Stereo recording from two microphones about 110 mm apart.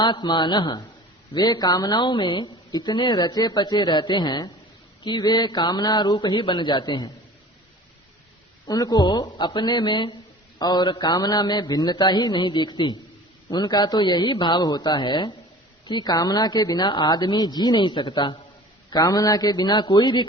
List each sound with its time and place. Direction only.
0.0 s a man's voice: 40° left (ahead or behind)
8.6 s a woman's voice: 35° left (ahead or behind)